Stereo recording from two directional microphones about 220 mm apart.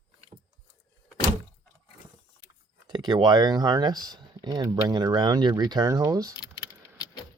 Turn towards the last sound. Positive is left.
turn(degrees=15)  # may be behind; listen again after turning